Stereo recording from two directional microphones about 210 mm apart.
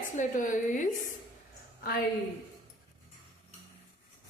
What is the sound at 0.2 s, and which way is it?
Speech, 40° left (ahead or behind).